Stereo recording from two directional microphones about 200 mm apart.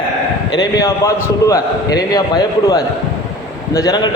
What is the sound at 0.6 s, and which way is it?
A man's voice, 15° left (ahead or behind).